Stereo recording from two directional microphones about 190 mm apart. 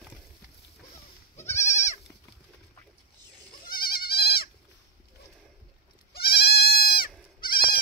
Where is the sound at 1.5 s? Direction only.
15° left (ahead or behind).